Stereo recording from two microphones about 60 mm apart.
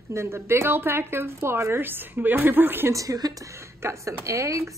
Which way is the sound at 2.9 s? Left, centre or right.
Right.